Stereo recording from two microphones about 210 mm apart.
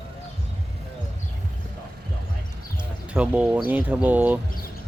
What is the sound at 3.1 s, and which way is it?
Speech, 5° right (ahead or behind).